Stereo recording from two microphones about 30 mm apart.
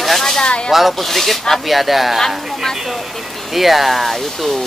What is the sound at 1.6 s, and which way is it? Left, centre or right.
Speech, centre.